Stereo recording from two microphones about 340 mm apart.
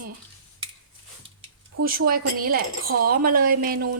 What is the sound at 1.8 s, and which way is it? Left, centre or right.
A woman's voice, right.